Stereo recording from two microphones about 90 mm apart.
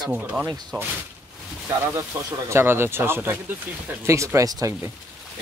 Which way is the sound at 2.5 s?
30° right (ahead or behind).